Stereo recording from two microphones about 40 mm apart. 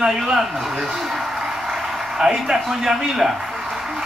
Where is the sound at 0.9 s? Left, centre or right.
Centre.